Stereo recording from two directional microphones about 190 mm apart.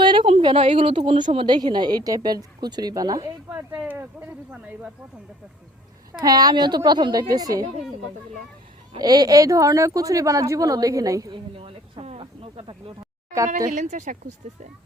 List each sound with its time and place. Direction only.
0.0 s speech: 25° right (ahead or behind); by 4.9 s 5° right (ahead or behind)
6.2 s speech: 20° right (ahead or behind)
9.0 s speech: 20° right (ahead or behind)
11.5 s a sound: 30° right (ahead or behind)
13.7 s speech: 40° right (ahead or behind)